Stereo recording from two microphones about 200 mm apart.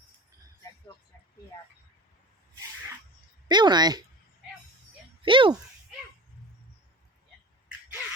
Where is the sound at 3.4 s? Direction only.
20° right (ahead or behind).